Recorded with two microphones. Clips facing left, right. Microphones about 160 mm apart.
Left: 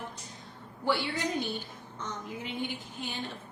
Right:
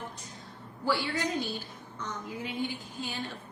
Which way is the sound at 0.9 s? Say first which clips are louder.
Even; 20° left (ahead or behind).